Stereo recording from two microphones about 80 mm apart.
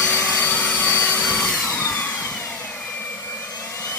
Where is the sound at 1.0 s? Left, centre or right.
Left.